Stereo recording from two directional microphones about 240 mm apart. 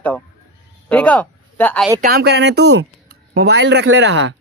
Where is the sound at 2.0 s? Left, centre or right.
Right.